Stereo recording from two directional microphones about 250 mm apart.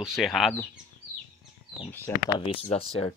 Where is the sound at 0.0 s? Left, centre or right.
Centre.